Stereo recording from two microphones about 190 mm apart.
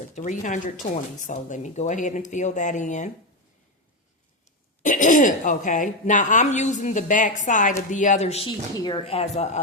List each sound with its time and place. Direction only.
0.2 s speech: 40° left (ahead or behind)
4.8 s speech: 40° left (ahead or behind)
8.7 s speech: 20° left (ahead or behind)